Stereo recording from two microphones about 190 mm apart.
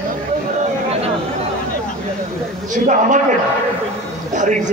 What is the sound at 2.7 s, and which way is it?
Speech, 40° right (ahead or behind).